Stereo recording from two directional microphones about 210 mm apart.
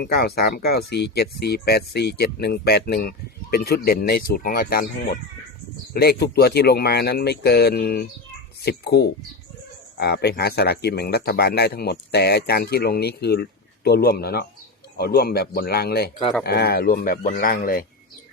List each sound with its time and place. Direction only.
0.0 s speech: 50° left (ahead or behind)